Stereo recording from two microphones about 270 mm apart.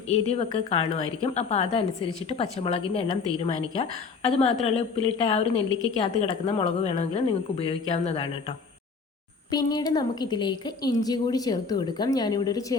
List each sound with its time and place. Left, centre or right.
0.1 s a woman's voice: left